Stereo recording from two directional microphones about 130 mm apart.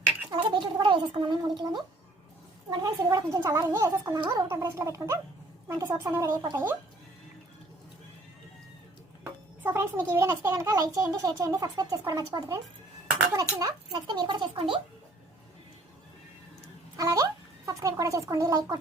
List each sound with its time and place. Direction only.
0.3 s a child's voice: 40° right (ahead or behind)
9.2 s a child's voice: 15° right (ahead or behind); by 14.8 s 40° right (ahead or behind)
17.0 s a child's voice: 25° right (ahead or behind)